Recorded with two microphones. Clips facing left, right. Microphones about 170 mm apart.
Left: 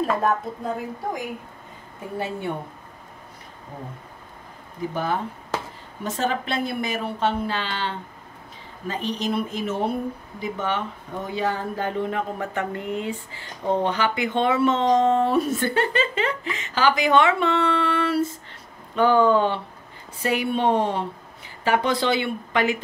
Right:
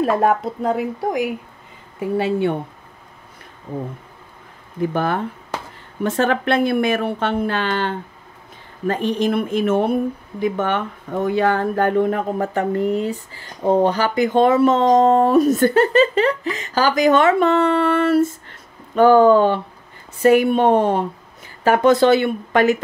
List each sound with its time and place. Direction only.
0.0 s a woman's voice: 75° right (ahead or behind)
4.9 s speech: 60° right (ahead or behind); by 22.8 s 45° right (ahead or behind)